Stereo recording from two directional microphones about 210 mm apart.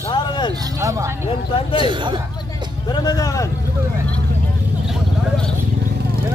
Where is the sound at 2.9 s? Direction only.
20° left (ahead or behind).